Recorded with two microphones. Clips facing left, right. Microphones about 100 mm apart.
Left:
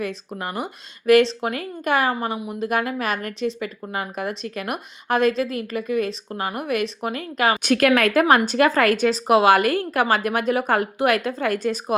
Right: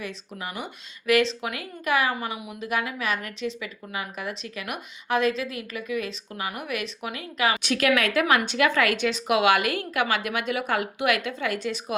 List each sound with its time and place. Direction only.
0.0 s speech: 45° left (ahead or behind)